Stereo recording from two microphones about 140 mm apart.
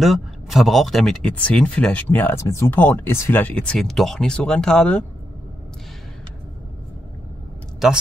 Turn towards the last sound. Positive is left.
turn(degrees=-5)  # may be behind; listen again after turning